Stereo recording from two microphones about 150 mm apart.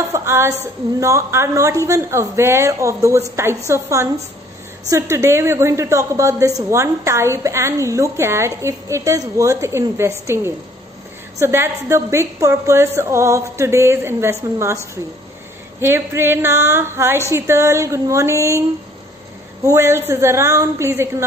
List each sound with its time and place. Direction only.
0.1 s a sound: 20° right (ahead or behind)
0.9 s a woman's voice: 20° right (ahead or behind)
15.8 s a woman's voice: 15° right (ahead or behind)
19.6 s a woman's voice: 20° right (ahead or behind)